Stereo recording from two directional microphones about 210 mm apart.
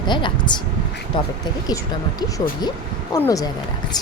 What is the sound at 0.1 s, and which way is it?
Speech, 20° left (ahead or behind).